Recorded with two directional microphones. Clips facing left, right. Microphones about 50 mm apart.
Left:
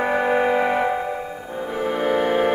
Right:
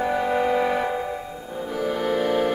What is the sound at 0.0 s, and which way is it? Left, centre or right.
Music, left.